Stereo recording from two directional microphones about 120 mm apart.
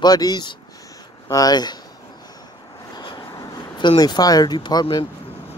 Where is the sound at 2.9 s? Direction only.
35° left (ahead or behind).